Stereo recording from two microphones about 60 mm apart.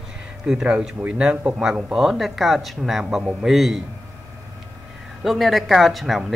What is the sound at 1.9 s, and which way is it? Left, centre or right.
Speech, centre.